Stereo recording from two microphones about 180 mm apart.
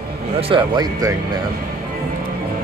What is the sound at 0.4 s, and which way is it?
Speech, 30° right (ahead or behind).